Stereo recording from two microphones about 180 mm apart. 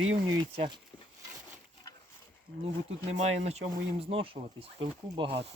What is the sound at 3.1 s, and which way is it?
Speech, 40° right (ahead or behind).